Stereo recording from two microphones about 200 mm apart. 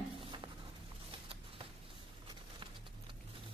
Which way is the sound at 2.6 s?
25° right (ahead or behind).